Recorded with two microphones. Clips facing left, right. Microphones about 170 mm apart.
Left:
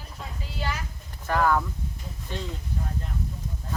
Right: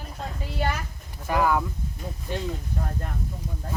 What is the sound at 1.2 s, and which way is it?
Speech, 10° right (ahead or behind).